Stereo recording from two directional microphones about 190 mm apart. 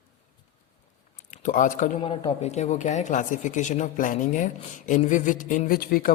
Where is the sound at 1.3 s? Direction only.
40° left (ahead or behind).